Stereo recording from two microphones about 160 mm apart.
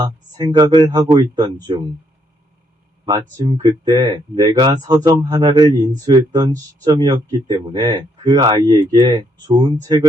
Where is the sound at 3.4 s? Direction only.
30° right (ahead or behind).